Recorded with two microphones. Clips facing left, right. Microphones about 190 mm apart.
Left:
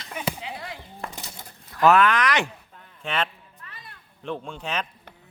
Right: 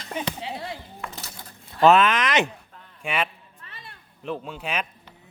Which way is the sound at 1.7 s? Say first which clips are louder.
Right 1 dB; 25° right (ahead or behind).